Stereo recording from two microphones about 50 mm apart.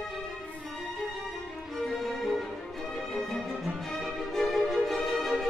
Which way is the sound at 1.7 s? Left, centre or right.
Centre.